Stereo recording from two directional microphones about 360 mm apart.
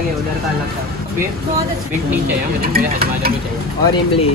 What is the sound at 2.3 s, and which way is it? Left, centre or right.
Speech, right.